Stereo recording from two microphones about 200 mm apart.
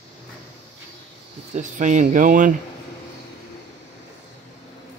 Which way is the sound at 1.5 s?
40° right (ahead or behind).